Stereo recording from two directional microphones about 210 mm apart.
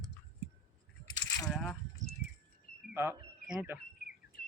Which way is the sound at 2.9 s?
10° right (ahead or behind).